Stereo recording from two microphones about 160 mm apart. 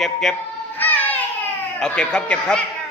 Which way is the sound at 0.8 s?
10° left (ahead or behind).